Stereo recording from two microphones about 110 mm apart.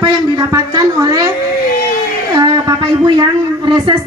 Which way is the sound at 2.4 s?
45° right (ahead or behind).